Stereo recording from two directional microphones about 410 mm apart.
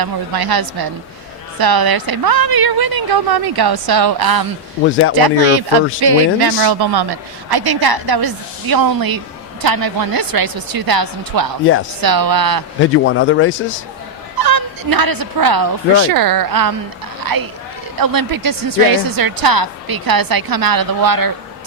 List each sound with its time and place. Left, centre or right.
0.0 s speech: right
12.8 s a man's voice: left
14.3 s speech: right